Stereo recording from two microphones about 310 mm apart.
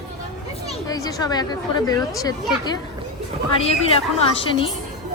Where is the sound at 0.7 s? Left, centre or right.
Centre.